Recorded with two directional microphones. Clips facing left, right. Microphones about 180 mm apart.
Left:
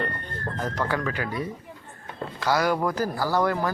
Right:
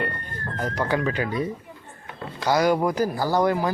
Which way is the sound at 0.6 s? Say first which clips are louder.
Right 3 dB; 15° right (ahead or behind).